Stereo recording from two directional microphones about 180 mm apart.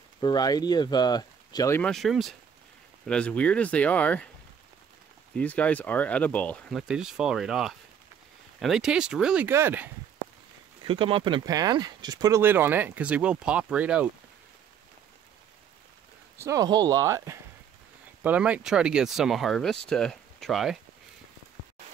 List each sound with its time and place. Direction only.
0.2 s speech: 20° left (ahead or behind)
1.8 s speech: centre (ahead or behind)
5.4 s speech: 10° left (ahead or behind)
6.8 s speech: 5° right (ahead or behind)
10.8 s speech: 30° right (ahead or behind); by 14.0 s 5° right (ahead or behind)
16.3 s speech: 20° right (ahead or behind); by 20.7 s centre (ahead or behind)